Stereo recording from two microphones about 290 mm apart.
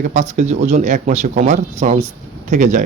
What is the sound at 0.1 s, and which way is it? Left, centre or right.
A man's voice, right.